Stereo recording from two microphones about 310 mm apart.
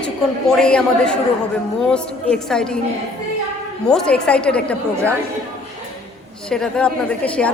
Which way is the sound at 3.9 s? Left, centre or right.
Centre.